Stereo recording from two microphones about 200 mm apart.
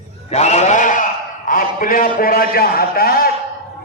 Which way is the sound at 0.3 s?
35° left (ahead or behind).